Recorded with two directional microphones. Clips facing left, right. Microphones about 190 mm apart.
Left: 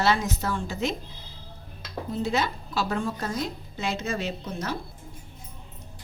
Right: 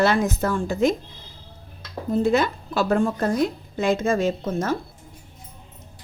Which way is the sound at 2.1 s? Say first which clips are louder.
Right 7 dB; 50° right (ahead or behind).